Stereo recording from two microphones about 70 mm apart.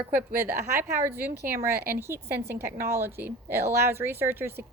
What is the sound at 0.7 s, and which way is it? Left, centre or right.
A woman's voice, right.